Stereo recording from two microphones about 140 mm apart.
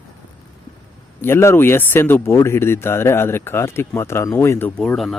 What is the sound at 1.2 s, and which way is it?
Speech, 20° left (ahead or behind).